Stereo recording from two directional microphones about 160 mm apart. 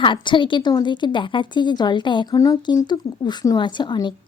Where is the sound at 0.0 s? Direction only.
30° left (ahead or behind).